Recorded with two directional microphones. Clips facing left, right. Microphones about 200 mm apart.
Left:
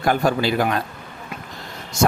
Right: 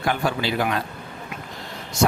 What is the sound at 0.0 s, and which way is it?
Speech, 40° left (ahead or behind).